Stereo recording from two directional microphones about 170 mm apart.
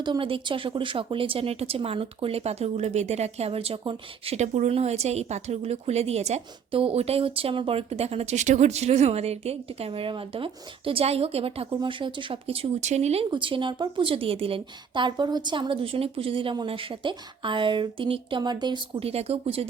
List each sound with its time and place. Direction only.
0.0 s speech: 30° right (ahead or behind)